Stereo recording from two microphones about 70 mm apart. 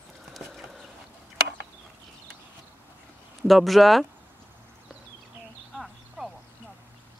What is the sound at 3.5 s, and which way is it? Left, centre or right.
Speech, centre.